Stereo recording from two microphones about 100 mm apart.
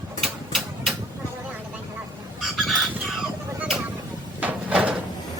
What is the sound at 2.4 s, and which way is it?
Chicken, centre (ahead or behind).